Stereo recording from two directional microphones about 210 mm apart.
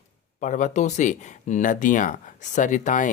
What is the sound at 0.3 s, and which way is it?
Speech, 35° left (ahead or behind).